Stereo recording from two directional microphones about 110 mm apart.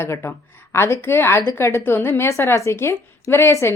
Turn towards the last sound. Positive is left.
turn(degrees=25)  # may be behind; listen again after turning